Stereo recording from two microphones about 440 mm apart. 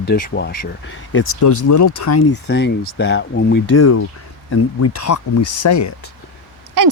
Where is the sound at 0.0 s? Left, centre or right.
Left.